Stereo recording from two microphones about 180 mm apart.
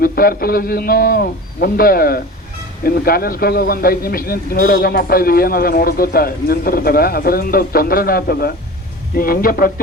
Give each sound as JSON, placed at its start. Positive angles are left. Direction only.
{"t": 0.0, "sound": "speech", "side_deg": 55}